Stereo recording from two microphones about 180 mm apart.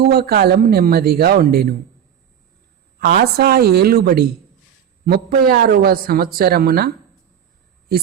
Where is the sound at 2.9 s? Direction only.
55° right (ahead or behind).